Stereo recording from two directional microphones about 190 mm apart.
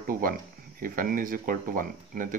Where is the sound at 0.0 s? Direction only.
50° right (ahead or behind).